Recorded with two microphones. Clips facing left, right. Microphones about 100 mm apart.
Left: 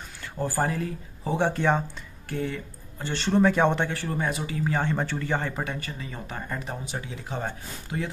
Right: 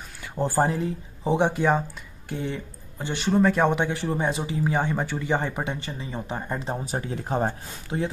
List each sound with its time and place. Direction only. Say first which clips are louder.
0.4 s speech: right 4 dB; 25° right (ahead or behind)
1.6 s speech: right 2 dB; 5° right (ahead or behind)
2.2 s speech: even; 20° right (ahead or behind); by 3.7 s centre (ahead or behind)
3.7 s speech: right 3 dB; 15° right (ahead or behind)
6.8 s speech: right 5 dB; 40° right (ahead or behind)